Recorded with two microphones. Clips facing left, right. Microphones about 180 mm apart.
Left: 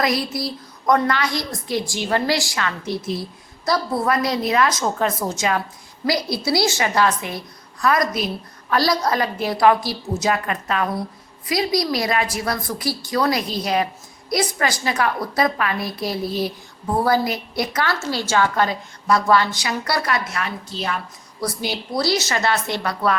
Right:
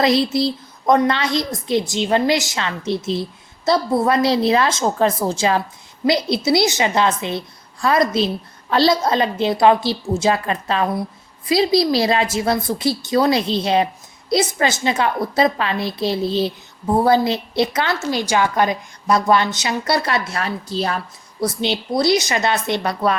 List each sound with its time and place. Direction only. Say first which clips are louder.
0.0 s a woman's voice: right 6 dB; 25° right (ahead or behind)
21.4 s a woman's voice: right 5 dB; 25° right (ahead or behind)